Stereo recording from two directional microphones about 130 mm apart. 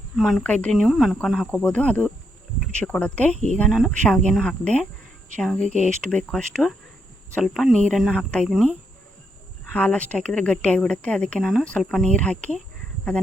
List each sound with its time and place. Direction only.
0.2 s speech: 5° left (ahead or behind)
0.7 s speech: centre (ahead or behind)
3.3 s speech: 60° right (ahead or behind)
3.6 s speech: 5° left (ahead or behind)
9.7 s speech: 10° left (ahead or behind)